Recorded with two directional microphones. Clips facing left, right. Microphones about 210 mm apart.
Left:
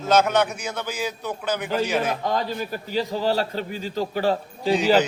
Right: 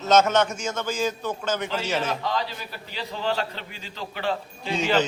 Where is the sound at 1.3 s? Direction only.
15° left (ahead or behind).